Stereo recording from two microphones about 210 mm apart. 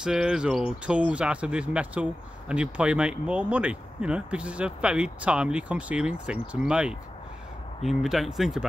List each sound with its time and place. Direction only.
0.0 s speech: 5° right (ahead or behind)